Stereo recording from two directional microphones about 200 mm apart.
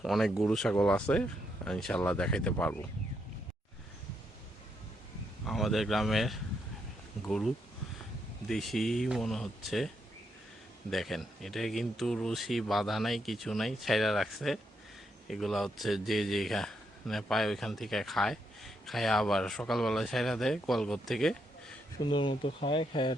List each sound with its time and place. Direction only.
0.0 s speech: centre (ahead or behind)
5.5 s speech: centre (ahead or behind)
10.9 s speech: centre (ahead or behind)
22.0 s speech: 25° left (ahead or behind)